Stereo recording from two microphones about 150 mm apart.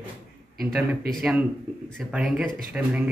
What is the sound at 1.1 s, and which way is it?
A man's voice, 5° right (ahead or behind).